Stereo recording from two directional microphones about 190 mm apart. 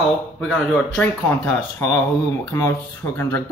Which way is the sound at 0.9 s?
10° left (ahead or behind).